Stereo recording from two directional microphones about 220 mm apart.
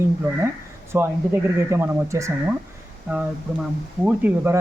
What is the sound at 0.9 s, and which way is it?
Speech, 10° right (ahead or behind).